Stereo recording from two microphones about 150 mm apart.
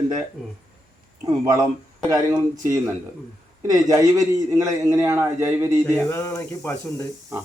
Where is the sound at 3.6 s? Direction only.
20° right (ahead or behind).